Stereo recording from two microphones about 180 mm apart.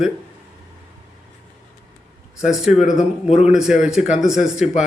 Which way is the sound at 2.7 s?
Centre (ahead or behind).